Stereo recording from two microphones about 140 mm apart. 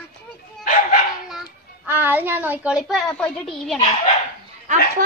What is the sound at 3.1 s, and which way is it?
Speech, 5° left (ahead or behind).